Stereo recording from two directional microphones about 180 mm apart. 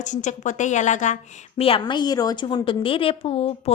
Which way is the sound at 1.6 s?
30° left (ahead or behind).